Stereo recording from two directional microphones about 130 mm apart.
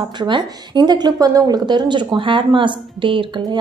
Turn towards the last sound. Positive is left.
turn(degrees=-40)  # may be behind; listen again after turning